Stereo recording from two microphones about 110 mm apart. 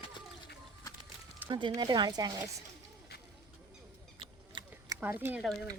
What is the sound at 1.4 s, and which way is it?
Speech, 45° right (ahead or behind).